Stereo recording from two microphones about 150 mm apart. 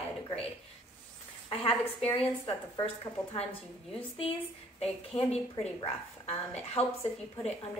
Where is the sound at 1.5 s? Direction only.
40° left (ahead or behind).